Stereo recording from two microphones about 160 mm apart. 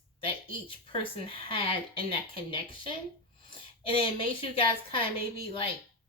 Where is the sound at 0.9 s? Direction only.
35° left (ahead or behind).